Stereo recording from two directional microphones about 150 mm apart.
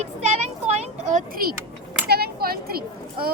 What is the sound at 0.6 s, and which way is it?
Speech, 50° right (ahead or behind).